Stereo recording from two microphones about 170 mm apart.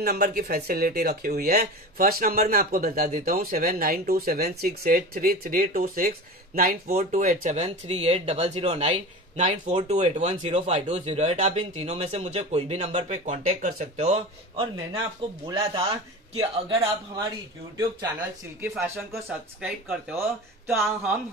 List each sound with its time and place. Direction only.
0.0 s speech: 60° right (ahead or behind)
13.9 s a man's voice: 40° right (ahead or behind); by 17.3 s 25° right (ahead or behind)
19.1 s speech: 10° right (ahead or behind)